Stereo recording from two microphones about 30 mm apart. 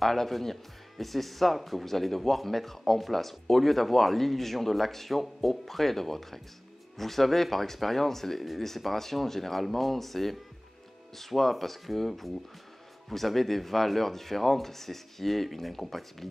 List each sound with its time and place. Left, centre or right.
0.0 s speech: centre